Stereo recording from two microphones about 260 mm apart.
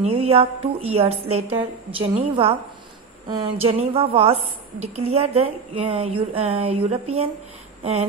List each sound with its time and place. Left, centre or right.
0.0 s a woman's voice: right